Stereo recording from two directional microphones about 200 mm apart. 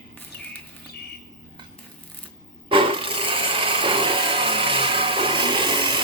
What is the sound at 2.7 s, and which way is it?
Wood, 25° right (ahead or behind).